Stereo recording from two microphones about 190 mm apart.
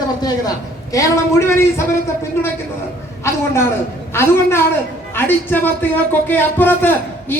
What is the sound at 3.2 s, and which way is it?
Speech, 15° left (ahead or behind).